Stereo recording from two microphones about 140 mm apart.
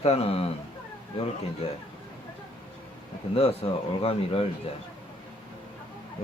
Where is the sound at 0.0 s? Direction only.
45° left (ahead or behind).